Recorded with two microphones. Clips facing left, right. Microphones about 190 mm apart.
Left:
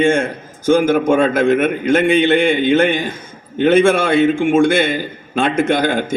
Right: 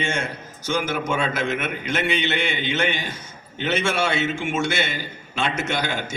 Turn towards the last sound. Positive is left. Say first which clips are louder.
# left 10 dB
turn(degrees=50)  # may be behind; listen again after turning